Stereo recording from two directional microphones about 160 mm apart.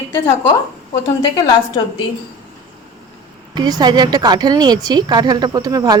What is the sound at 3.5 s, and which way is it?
A woman's voice, 25° right (ahead or behind).